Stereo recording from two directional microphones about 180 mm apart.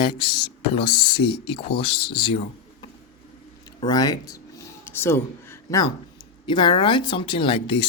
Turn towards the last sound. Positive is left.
turn(degrees=30)  # may be behind; listen again after turning